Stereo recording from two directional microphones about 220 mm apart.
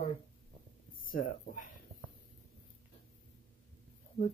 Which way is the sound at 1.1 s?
40° left (ahead or behind).